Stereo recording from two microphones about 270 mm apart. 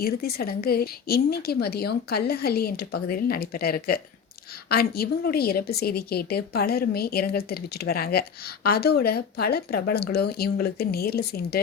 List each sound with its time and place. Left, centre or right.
0.0 s a woman's voice: left